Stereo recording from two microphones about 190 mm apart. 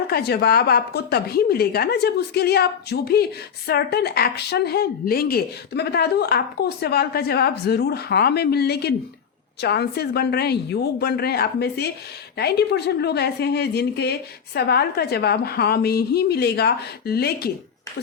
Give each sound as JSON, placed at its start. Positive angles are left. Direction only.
{"t": 0.1, "sound": "speech", "side_deg": 60}